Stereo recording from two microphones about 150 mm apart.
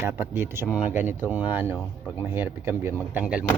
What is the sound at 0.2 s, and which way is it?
Speech, 15° right (ahead or behind).